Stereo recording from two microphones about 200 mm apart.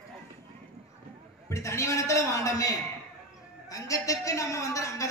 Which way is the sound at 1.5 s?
15° left (ahead or behind).